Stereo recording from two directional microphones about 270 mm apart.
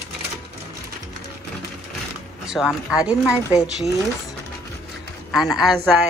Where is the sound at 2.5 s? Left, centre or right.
Centre.